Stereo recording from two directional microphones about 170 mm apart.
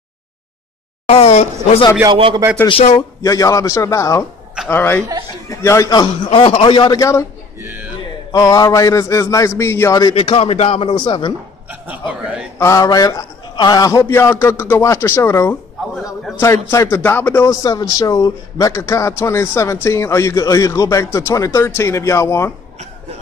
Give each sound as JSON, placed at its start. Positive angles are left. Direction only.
{"t": 1.0, "sound": "a man's voice", "side_deg": 35}
{"t": 2.0, "sound": "speech", "side_deg": -30}
{"t": 2.7, "sound": "a man's voice", "side_deg": 30}
{"t": 7.6, "sound": "speech", "side_deg": -10}
{"t": 8.3, "sound": "a man's voice", "side_deg": 20}
{"t": 10.1, "sound": "a man's voice", "side_deg": 35}
{"t": 12.1, "sound": "speech", "side_deg": -5}
{"t": 12.5, "sound": "a man's voice", "side_deg": 20}
{"t": 16.7, "sound": "a man's voice", "side_deg": 15}